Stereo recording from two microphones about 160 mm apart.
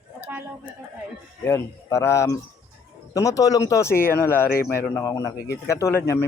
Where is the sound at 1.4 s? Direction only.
15° left (ahead or behind).